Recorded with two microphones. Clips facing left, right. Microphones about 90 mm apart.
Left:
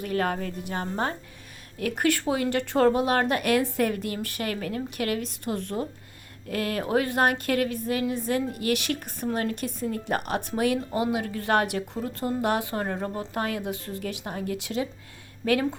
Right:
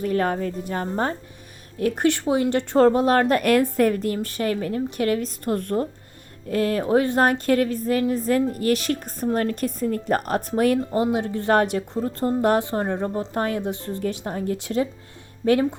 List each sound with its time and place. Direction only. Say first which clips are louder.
0.0 s a woman's voice: right 5 dB; 35° right (ahead or behind)
1.8 s a woman's voice: right 4 dB; 25° right (ahead or behind); by 5.9 s 45° right (ahead or behind)
6.5 s a woman's voice: right 6 dB; 35° right (ahead or behind)